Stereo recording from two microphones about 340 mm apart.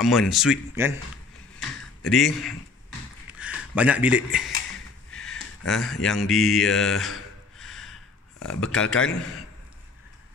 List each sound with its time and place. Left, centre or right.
0.0 s a man's voice: centre
3.3 s a sound: centre
5.7 s a man's voice: centre